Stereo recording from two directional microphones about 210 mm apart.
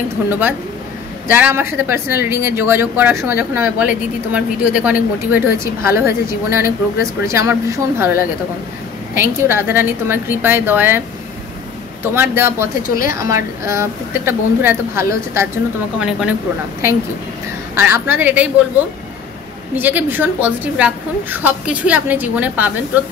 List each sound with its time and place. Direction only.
0.3 s speech: 10° right (ahead or behind)
12.0 s speech: 10° right (ahead or behind)
17.7 s speech: 10° right (ahead or behind)
19.7 s speech: 10° right (ahead or behind)